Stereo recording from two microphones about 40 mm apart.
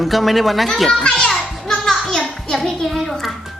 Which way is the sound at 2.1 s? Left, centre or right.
Centre.